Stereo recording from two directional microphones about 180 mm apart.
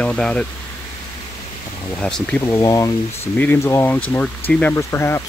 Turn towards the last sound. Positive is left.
turn(degrees=15)  # may be behind; listen again after turning